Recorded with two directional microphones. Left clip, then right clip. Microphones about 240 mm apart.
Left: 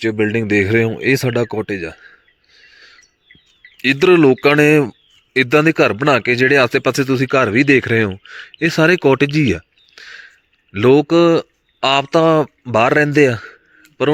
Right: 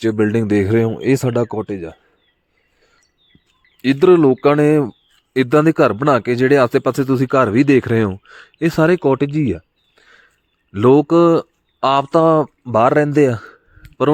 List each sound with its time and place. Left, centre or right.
0.0 s speech: right
2.6 s a sound: centre
4.0 s speech: centre